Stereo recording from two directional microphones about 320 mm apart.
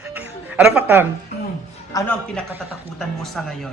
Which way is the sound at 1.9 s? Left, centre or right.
Centre.